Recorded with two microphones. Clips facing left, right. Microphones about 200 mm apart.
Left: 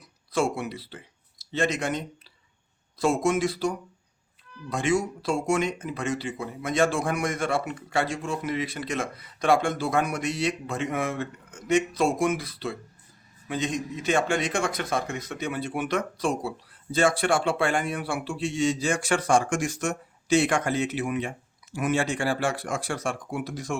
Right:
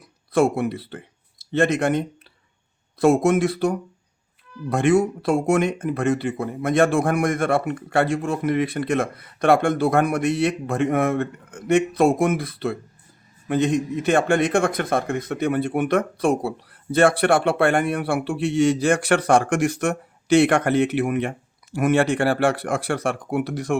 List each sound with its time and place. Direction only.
0.3 s a man's voice: 55° right (ahead or behind)